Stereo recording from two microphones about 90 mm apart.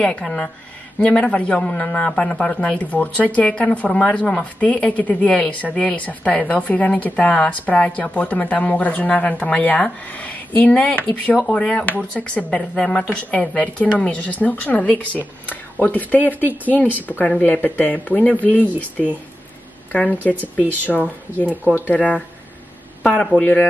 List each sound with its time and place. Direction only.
0.0 s a woman's voice: 10° left (ahead or behind)
19.9 s a woman's voice: 20° left (ahead or behind)